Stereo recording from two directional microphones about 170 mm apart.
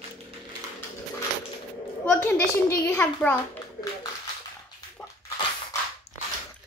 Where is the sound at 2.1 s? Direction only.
15° left (ahead or behind).